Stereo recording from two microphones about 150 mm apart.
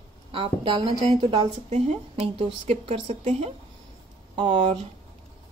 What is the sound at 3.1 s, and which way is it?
Speech, 50° right (ahead or behind).